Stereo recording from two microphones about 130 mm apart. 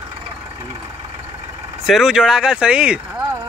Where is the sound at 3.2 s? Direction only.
25° right (ahead or behind).